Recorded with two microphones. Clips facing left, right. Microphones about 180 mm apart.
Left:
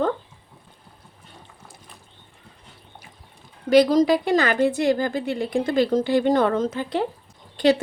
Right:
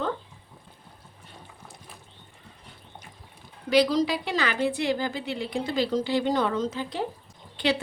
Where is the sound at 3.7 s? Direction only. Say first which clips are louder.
Left 6 dB; 50° left (ahead or behind).